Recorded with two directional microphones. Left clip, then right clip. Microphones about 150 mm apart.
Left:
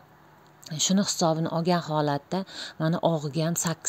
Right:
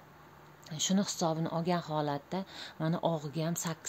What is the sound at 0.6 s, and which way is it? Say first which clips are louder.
Speech: left 7 dB; 40° left (ahead or behind).